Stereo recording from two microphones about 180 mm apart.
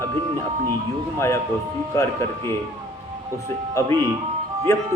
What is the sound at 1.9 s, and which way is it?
Speech, 15° left (ahead or behind).